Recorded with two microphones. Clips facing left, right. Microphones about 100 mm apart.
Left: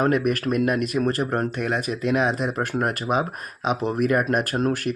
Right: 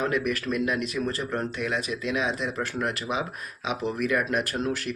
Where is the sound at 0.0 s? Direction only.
50° left (ahead or behind).